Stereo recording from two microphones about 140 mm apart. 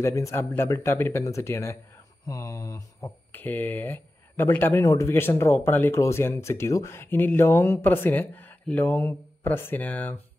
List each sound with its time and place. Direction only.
0.0 s speech: 20° left (ahead or behind)